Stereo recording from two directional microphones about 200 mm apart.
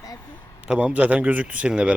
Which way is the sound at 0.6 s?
5° right (ahead or behind).